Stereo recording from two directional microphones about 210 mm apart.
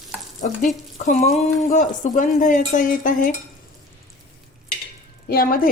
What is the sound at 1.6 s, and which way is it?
Speech, 35° left (ahead or behind).